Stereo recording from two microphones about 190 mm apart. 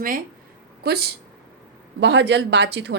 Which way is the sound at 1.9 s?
65° right (ahead or behind).